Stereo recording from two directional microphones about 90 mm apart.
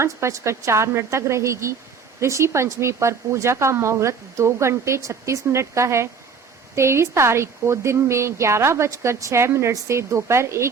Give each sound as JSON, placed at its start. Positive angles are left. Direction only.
{"t": 0.0, "sound": "speech", "side_deg": -35}